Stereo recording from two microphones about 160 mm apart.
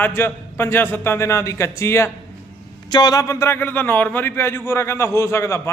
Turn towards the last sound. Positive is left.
turn(degrees=20)  # may be behind; listen again after turning